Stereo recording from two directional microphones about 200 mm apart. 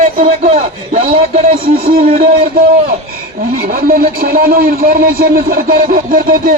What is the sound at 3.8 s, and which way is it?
A man's voice, 45° right (ahead or behind).